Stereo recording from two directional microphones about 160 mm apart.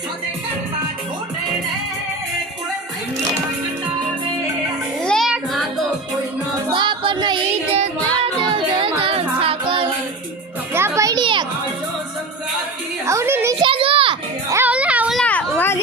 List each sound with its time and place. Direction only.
5.0 s child singing: centre (ahead or behind)
6.7 s child singing: 30° right (ahead or behind)
7.8 s music: 35° right (ahead or behind)
10.8 s music: 15° right (ahead or behind)
13.1 s a sound: 15° right (ahead or behind)
13.6 s children playing: 35° right (ahead or behind)
14.5 s music: 10° right (ahead or behind)
15.2 s a sound: 10° left (ahead or behind)